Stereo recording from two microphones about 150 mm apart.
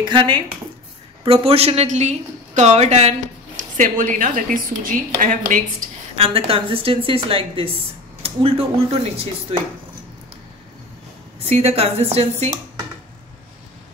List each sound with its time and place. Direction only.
0.0 s a woman's voice: 30° right (ahead or behind); by 5.6 s 60° right (ahead or behind)
5.8 s a sound: 60° right (ahead or behind)
6.1 s a woman's voice: 40° right (ahead or behind)
11.3 s a woman's voice: 40° right (ahead or behind)